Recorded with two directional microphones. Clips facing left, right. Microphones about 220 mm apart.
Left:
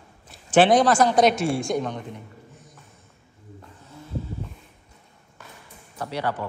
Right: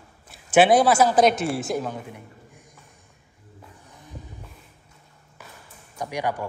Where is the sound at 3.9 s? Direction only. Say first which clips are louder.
Left 11 dB; 15° right (ahead or behind).